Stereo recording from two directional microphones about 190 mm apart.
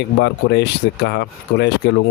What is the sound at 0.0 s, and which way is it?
Speech, 65° left (ahead or behind).